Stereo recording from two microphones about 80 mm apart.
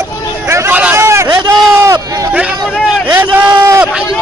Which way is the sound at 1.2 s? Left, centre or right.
Right.